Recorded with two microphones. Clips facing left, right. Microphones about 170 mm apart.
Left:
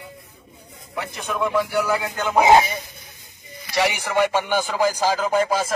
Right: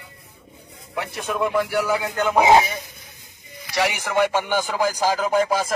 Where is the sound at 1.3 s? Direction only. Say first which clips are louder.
Even; 10° right (ahead or behind).